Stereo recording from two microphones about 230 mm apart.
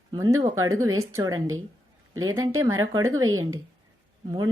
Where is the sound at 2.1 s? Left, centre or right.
Right.